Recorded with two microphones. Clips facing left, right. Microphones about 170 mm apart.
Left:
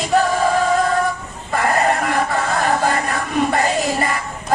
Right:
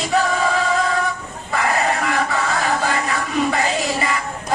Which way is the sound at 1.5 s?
50° left (ahead or behind).